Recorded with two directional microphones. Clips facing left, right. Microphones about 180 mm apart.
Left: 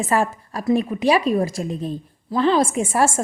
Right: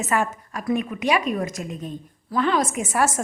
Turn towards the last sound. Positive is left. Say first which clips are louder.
# left 3 dB
turn(degrees=30)  # may be behind; listen again after turning